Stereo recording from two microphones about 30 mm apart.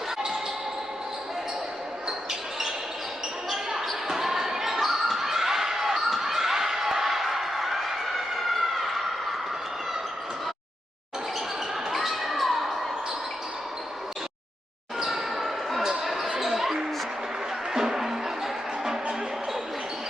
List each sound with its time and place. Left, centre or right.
4.1 s basketball bounce: centre
11.9 s basketball bounce: centre
14.9 s basketball bounce: centre
15.8 s basketball bounce: centre
17.7 s music: centre